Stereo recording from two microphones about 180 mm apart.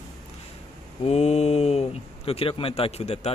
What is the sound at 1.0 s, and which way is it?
Speech, 35° left (ahead or behind).